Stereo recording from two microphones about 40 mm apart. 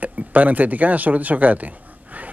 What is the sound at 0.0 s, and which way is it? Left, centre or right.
Speech, right.